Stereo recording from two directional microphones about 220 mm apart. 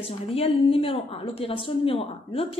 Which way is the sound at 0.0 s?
25° left (ahead or behind).